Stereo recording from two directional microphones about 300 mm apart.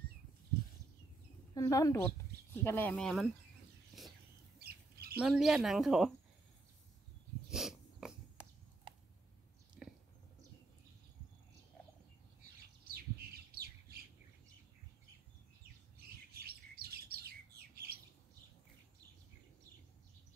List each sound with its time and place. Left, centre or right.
1.5 s a woman's voice: centre
4.0 s a sound: centre
4.6 s squawk: right
5.2 s speech: centre
7.4 s a sound: centre
12.8 s bird: right
16.3 s bird: right
17.9 s squawk: right